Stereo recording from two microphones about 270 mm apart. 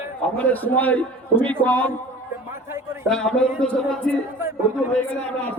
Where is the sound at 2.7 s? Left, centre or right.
Centre.